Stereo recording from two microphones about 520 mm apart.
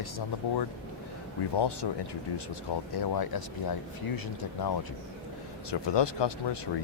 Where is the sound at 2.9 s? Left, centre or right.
Left.